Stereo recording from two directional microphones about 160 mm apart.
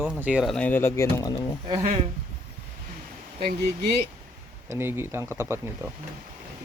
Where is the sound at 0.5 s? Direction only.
10° left (ahead or behind).